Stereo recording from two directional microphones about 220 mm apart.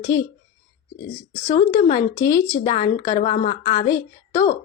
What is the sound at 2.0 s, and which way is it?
A woman's voice, 15° left (ahead or behind).